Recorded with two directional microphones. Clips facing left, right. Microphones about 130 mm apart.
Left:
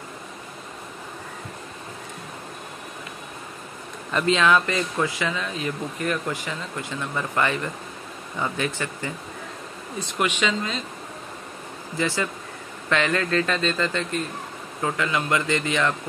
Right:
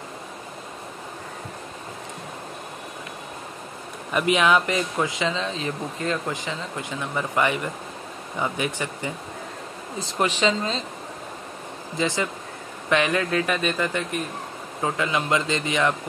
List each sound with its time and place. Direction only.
4.1 s speech: 15° right (ahead or behind)
10.1 s speech: 35° right (ahead or behind)
12.0 s speech: 20° right (ahead or behind)